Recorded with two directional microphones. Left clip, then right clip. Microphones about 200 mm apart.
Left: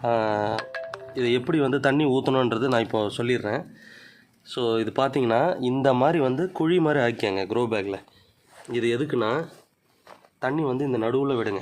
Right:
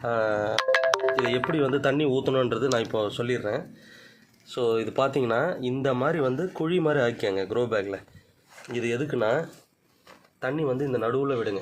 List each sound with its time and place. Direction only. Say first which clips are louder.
0.0 s speech: left 2 dB; 50° left (ahead or behind)
0.5 s music: right 8 dB; 50° right (ahead or behind)
1.3 s speech: left 2 dB; 45° left (ahead or behind); by 9.5 s 30° left (ahead or behind)
10.4 s speech: left 2 dB; 50° left (ahead or behind)